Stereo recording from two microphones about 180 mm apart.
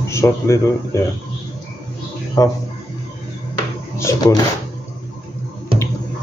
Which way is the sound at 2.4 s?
20° left (ahead or behind).